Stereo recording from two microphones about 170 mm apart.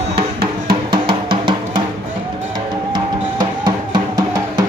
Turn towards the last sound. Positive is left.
turn(degrees=-25)  # may be behind; listen again after turning